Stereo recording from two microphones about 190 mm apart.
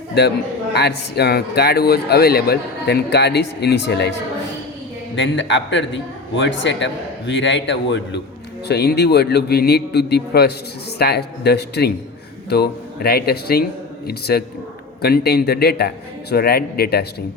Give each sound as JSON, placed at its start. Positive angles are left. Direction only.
{"t": 0.1, "sound": "speech", "side_deg": 60}
{"t": 5.1, "sound": "a man's voice", "side_deg": 75}
{"t": 8.6, "sound": "speech", "side_deg": 60}